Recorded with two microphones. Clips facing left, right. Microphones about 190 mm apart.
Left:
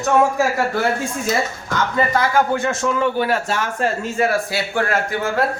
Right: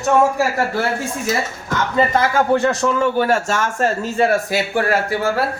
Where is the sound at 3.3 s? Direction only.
45° right (ahead or behind).